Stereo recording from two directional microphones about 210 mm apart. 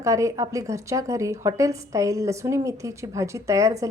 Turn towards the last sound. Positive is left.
turn(degrees=-15)  # may be behind; listen again after turning